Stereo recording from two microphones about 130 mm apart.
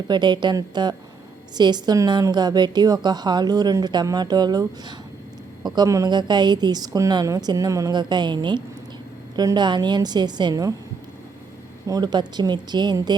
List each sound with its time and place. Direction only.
0.1 s a woman's voice: 35° right (ahead or behind)
11.9 s a woman's voice: 30° right (ahead or behind)